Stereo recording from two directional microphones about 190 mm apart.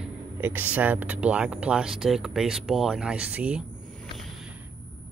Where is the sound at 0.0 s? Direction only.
10° right (ahead or behind).